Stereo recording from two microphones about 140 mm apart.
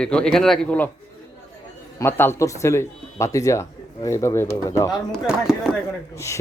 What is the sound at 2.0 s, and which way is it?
Speech, 15° left (ahead or behind).